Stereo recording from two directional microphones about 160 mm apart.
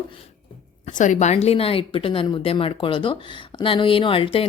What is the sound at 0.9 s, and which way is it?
Speech, 50° left (ahead or behind).